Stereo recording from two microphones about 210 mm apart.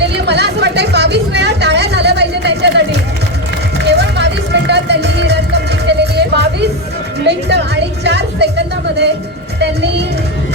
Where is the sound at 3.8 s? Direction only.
55° right (ahead or behind).